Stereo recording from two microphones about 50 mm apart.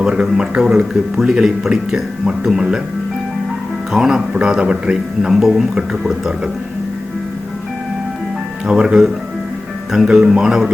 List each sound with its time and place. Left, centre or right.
0.0 s a sound: centre
0.3 s speech: centre
3.9 s speech: centre
8.6 s speech: centre